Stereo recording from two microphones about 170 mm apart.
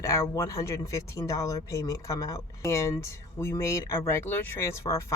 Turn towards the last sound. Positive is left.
turn(degrees=15)  # may be behind; listen again after turning